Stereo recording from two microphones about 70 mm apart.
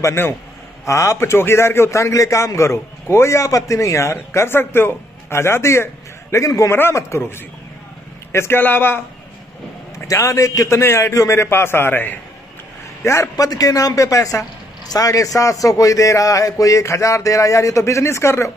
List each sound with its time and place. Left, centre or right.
0.0 s a man's voice: left
0.8 s a man's voice: left
6.3 s a man's voice: left
6.7 s a man's voice: left
9.9 s a man's voice: left
13.0 s a man's voice: left
13.4 s a man's voice: left